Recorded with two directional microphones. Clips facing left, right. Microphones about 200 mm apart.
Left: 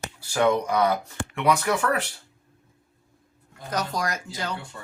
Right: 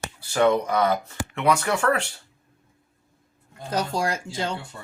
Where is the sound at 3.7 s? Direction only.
30° right (ahead or behind).